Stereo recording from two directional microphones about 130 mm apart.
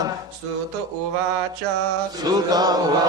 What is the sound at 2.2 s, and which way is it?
Chant, 30° right (ahead or behind).